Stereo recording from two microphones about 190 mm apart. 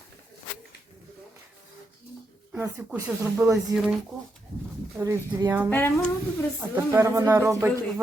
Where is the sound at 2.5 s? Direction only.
10° right (ahead or behind).